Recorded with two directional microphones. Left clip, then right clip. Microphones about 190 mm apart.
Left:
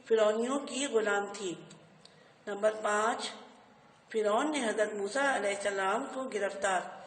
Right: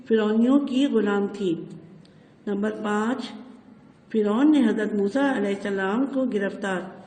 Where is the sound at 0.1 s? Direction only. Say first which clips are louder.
Right 6 dB; 35° right (ahead or behind).